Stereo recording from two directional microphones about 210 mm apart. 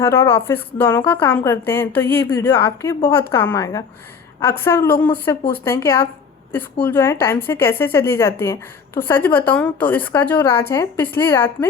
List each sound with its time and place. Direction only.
0.0 s a woman's voice: 10° left (ahead or behind)